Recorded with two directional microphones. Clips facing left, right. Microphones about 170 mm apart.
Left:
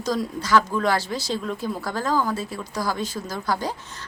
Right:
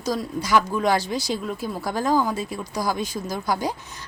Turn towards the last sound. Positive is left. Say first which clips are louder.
# right 1 dB
turn(degrees=-15)  # may be behind; listen again after turning